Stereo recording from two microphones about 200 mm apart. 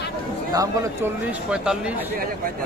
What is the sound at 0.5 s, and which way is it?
Speech, 15° right (ahead or behind).